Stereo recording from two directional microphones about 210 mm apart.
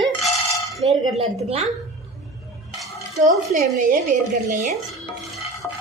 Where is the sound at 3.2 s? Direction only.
40° right (ahead or behind).